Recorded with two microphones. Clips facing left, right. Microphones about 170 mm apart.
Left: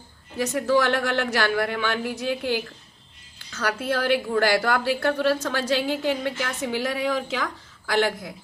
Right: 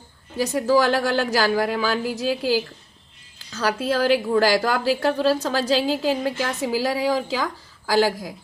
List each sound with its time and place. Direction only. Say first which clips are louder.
0.3 s speech: right 2 dB; 35° right (ahead or behind)